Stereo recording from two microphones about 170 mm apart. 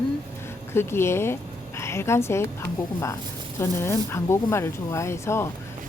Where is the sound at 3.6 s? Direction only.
15° left (ahead or behind).